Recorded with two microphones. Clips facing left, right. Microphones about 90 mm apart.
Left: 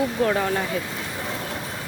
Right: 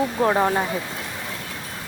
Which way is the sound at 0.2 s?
30° right (ahead or behind).